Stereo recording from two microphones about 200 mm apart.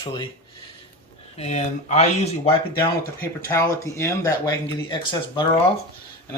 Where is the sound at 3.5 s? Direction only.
15° left (ahead or behind).